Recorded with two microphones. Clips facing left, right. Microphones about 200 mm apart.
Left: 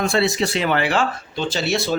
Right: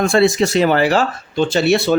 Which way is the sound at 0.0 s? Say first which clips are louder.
Right 6 dB; 50° right (ahead or behind).